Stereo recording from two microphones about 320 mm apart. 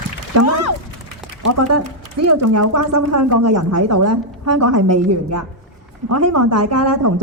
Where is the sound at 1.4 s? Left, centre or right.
Right.